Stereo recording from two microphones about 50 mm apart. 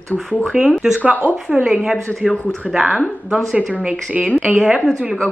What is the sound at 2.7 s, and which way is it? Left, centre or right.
A woman's voice, centre.